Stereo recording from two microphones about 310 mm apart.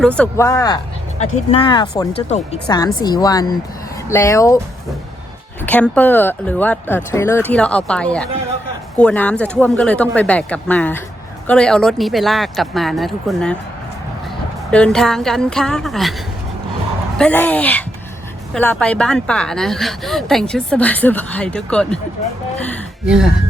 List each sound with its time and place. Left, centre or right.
0.0 s speech: centre
5.6 s a woman's voice: centre
14.7 s a woman's voice: centre
17.2 s a woman's voice: centre